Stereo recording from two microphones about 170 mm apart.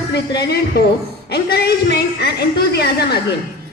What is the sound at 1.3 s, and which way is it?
A woman's voice, 70° left (ahead or behind).